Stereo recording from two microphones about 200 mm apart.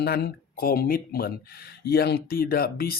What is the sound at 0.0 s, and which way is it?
Speech, 55° left (ahead or behind).